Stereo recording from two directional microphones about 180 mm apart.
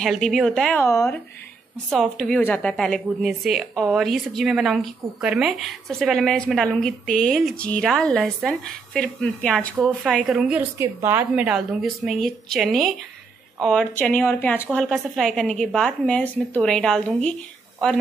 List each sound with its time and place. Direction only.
0.0 s a woman's voice: centre (ahead or behind)
0.8 s speech: 15° left (ahead or behind)
1.9 s a woman's voice: centre (ahead or behind)
10.8 s a woman's voice: 15° right (ahead or behind); by 18.0 s 5° left (ahead or behind)